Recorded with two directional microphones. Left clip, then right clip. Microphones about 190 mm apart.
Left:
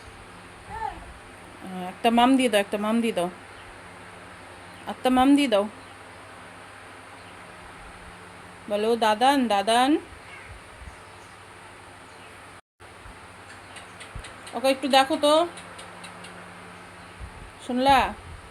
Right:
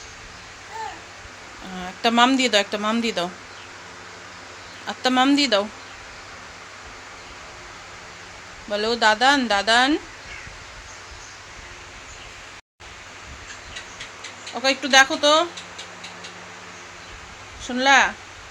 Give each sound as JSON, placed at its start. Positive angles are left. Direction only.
{"t": 1.8, "sound": "speech", "side_deg": 10}
{"t": 4.9, "sound": "speech", "side_deg": 5}
{"t": 8.7, "sound": "speech", "side_deg": 0}
{"t": 14.5, "sound": "speech", "side_deg": 5}
{"t": 17.7, "sound": "speech", "side_deg": 5}